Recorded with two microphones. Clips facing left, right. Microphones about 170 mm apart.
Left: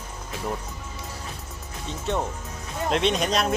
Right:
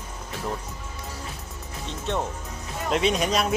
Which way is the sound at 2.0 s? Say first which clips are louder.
Left 1 dB; centre (ahead or behind).